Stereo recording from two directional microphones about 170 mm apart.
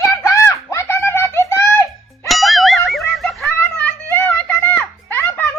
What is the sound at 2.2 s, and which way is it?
Music, centre (ahead or behind).